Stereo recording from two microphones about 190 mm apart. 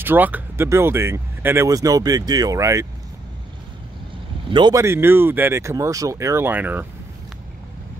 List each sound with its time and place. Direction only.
0.0 s speech: 10° right (ahead or behind)
4.5 s speech: 25° right (ahead or behind)